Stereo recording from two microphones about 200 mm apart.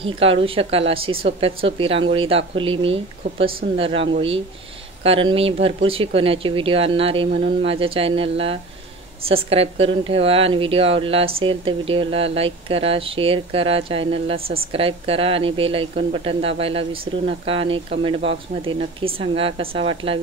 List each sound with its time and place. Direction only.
0.2 s a woman's voice: 30° right (ahead or behind)